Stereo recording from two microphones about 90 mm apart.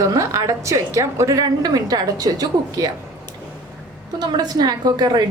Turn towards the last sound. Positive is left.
turn(degrees=-50)  # may be behind; listen again after turning